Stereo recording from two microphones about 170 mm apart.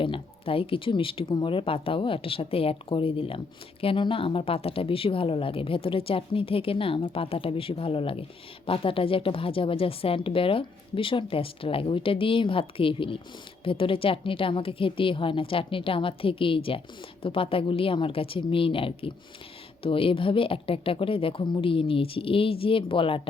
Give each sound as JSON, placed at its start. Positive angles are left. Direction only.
{"t": 0.0, "sound": "speech", "side_deg": 30}